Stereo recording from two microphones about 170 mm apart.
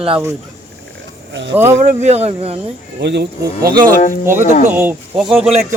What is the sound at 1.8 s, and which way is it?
Speech, 45° right (ahead or behind).